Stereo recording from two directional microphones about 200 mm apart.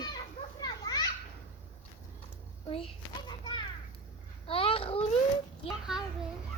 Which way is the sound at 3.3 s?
20° left (ahead or behind).